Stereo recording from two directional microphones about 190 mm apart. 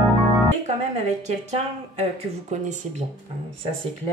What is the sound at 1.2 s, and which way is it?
Speech, 35° right (ahead or behind).